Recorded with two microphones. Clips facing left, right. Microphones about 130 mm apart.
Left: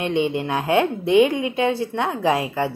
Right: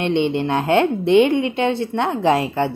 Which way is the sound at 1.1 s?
25° right (ahead or behind).